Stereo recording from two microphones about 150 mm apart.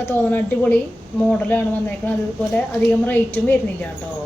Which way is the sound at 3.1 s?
10° left (ahead or behind).